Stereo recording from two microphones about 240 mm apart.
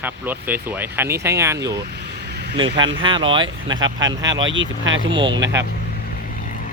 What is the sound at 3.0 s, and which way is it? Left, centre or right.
Speech, right.